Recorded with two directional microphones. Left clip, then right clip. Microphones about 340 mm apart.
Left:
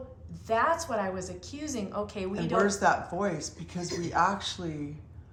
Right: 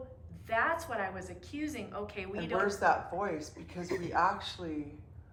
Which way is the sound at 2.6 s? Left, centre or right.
Left.